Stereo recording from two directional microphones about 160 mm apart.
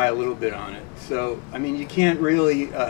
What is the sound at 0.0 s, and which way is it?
Speech, 20° left (ahead or behind).